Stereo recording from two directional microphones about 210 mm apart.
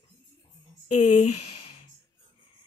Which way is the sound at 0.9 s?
35° left (ahead or behind).